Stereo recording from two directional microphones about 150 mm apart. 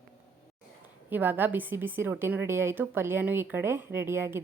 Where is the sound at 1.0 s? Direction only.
15° right (ahead or behind).